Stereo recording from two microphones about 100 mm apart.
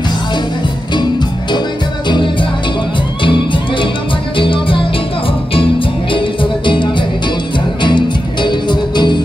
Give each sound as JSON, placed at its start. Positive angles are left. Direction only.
{"t": 2.0, "sound": "music", "side_deg": 50}